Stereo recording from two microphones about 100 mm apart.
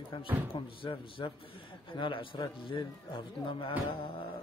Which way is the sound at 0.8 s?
55° left (ahead or behind).